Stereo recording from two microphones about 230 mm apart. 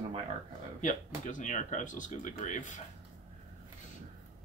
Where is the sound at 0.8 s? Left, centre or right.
Left.